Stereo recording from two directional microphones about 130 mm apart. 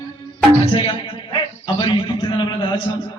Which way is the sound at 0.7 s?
40° left (ahead or behind).